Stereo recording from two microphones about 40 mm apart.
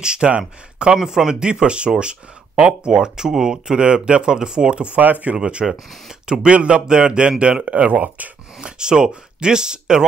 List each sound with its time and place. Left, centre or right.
0.0 s speech: right
4.9 s speech: right
5.4 s speech: right
7.6 s speech: right
8.5 s speech: right